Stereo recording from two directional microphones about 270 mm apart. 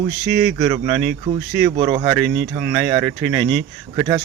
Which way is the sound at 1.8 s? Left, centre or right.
Centre.